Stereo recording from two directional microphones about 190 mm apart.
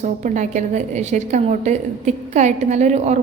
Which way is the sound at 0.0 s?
40° right (ahead or behind).